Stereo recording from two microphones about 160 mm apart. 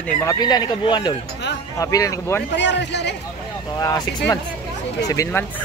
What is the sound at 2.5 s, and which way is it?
Speech, 90° left.